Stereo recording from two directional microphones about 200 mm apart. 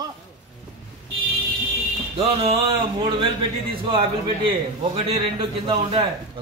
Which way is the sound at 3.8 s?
25° right (ahead or behind).